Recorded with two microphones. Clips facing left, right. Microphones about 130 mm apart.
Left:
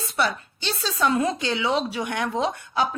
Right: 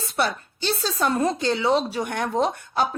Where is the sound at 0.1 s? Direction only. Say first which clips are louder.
Even; 45° right (ahead or behind).